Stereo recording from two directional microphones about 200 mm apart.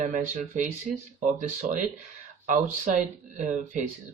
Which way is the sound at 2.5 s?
40° right (ahead or behind).